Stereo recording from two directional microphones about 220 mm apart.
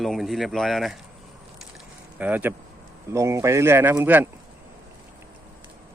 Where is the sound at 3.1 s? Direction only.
15° right (ahead or behind).